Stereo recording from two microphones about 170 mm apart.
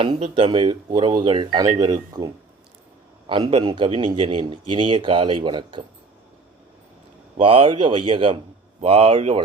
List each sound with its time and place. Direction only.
0.0 s speech: 30° right (ahead or behind)
7.3 s a man's voice: 30° right (ahead or behind)